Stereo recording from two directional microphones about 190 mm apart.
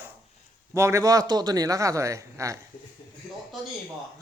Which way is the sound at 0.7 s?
15° right (ahead or behind).